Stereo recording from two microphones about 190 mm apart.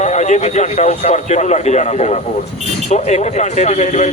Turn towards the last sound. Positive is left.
turn(degrees=35)  # may be behind; listen again after turning